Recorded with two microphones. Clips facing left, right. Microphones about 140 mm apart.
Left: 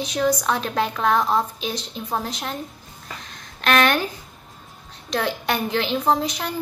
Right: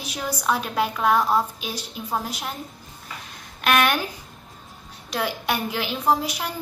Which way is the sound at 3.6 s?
10° right (ahead or behind).